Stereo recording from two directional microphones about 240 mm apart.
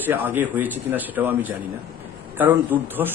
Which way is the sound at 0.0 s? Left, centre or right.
Centre.